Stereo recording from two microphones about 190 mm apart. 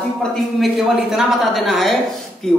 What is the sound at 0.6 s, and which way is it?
A woman's voice, centre (ahead or behind).